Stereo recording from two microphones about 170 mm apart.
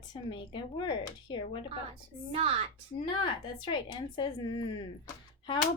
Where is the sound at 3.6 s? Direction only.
30° left (ahead or behind).